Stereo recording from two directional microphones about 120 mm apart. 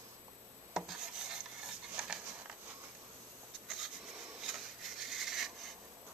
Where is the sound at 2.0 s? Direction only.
5° right (ahead or behind).